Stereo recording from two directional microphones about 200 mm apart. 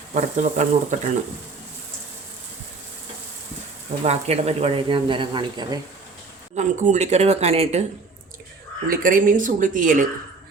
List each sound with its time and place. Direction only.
0.1 s speech: 35° right (ahead or behind)
4.0 s speech: 30° right (ahead or behind)
6.6 s speech: 35° right (ahead or behind)
8.9 s speech: 45° right (ahead or behind)